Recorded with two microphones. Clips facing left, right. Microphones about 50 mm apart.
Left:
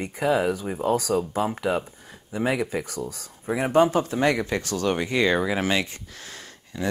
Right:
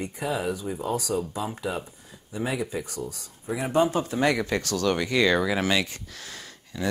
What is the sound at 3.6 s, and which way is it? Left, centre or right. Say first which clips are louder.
Speech: left 4 dB; left.